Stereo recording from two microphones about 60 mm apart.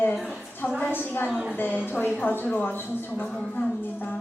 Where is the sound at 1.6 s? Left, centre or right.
Left.